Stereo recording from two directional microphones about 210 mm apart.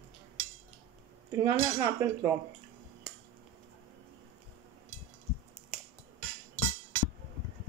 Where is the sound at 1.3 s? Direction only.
15° right (ahead or behind).